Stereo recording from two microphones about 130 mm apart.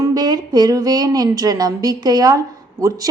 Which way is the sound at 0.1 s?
30° right (ahead or behind).